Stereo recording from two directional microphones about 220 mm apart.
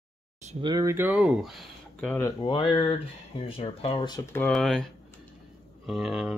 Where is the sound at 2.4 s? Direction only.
25° left (ahead or behind).